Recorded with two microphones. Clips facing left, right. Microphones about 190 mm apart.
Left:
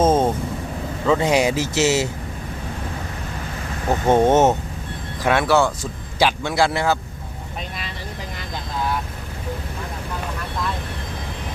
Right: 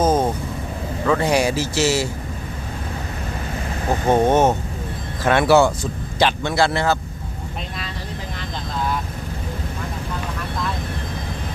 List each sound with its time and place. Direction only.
0.0 s vehicle: 25° left (ahead or behind)
1.0 s speech: 20° left (ahead or behind)
4.0 s speech: 20° left (ahead or behind)
5.2 s speech: 5° left (ahead or behind)
5.5 s speech: 5° right (ahead or behind)
5.8 s speech: 10° left (ahead or behind)